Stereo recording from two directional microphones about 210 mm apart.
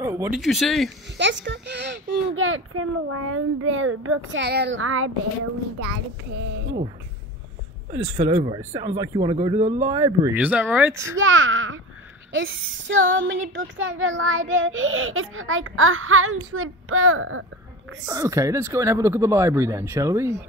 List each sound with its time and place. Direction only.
0.0 s speech: 10° right (ahead or behind)
1.1 s child singing: 60° right (ahead or behind); by 5.1 s 75° right (ahead or behind)
7.9 s speech: 25° right (ahead or behind)
11.1 s child singing: 70° right (ahead or behind)
12.3 s a woman's voice: 70° right (ahead or behind)
13.1 s child singing: 60° right (ahead or behind); by 17.5 s 75° right (ahead or behind)
18.0 s speech: 15° right (ahead or behind)